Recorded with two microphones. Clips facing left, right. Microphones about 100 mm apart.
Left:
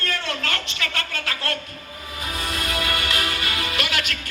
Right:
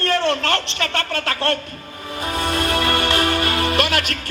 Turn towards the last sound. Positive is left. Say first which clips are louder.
# right 7 dB
turn(degrees=-45)  # may be behind; listen again after turning